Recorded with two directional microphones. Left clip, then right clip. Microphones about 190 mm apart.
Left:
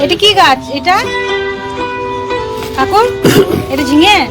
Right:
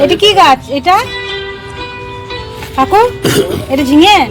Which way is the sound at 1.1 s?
30° left (ahead or behind).